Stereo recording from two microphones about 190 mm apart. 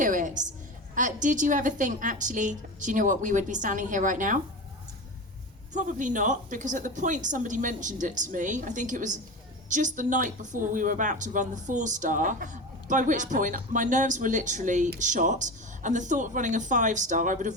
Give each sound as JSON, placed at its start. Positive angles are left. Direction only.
{"t": 0.0, "sound": "a sound", "side_deg": -45}
{"t": 0.9, "sound": "a woman's voice", "side_deg": -40}
{"t": 5.7, "sound": "speech", "side_deg": -40}